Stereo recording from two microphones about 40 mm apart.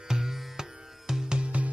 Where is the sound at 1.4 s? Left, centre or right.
Right.